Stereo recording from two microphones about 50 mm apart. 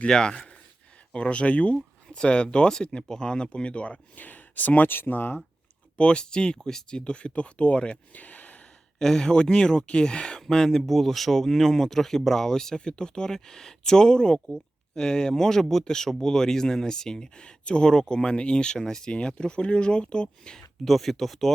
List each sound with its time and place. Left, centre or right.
0.1 s speech: centre; by 5.4 s left
6.0 s speech: centre
9.0 s speech: centre
20.8 s speech: centre